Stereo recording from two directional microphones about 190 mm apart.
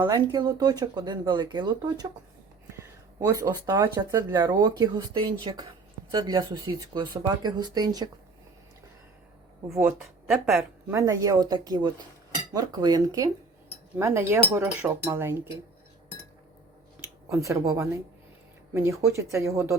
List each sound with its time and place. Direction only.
0.0 s speech: 20° right (ahead or behind)
9.7 s speech: 10° right (ahead or behind)
17.2 s speech: 15° right (ahead or behind)